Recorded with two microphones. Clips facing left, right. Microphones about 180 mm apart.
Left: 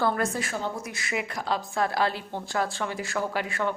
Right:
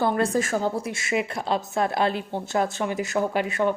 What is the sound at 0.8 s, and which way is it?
A woman's voice, 25° right (ahead or behind).